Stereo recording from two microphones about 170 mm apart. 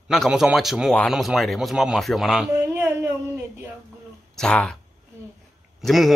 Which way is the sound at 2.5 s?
15° right (ahead or behind).